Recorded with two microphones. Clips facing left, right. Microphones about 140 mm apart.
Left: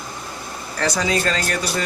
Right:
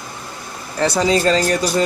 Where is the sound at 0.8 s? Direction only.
25° right (ahead or behind).